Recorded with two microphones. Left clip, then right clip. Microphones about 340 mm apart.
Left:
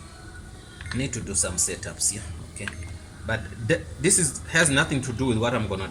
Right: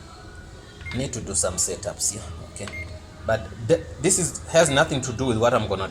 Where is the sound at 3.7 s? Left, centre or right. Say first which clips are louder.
Right 3 dB; right.